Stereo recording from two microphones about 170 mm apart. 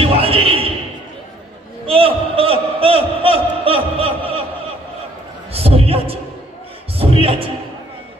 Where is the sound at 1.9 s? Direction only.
35° right (ahead or behind).